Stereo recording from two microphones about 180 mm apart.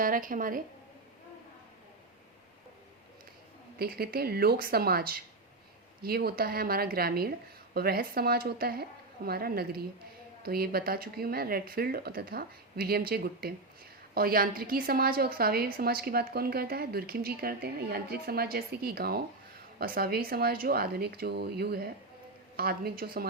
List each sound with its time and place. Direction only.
0.0 s a woman's voice: 50° right (ahead or behind)
3.8 s a woman's voice: 60° right (ahead or behind)